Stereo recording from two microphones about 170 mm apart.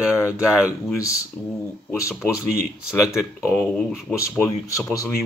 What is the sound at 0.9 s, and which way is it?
Speech, 20° left (ahead or behind).